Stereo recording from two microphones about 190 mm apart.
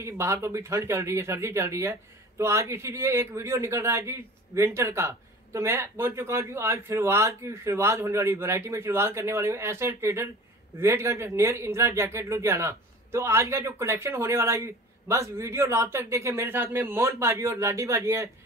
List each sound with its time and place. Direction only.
0.0 s speech: 15° right (ahead or behind)